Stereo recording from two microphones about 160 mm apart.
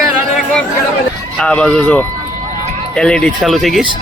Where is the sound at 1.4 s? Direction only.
10° left (ahead or behind).